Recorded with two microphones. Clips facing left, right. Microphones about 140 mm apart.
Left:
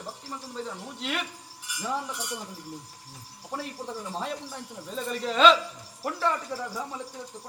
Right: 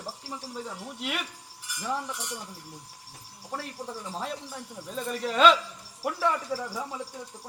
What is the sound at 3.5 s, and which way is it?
A man's voice, 5° left (ahead or behind).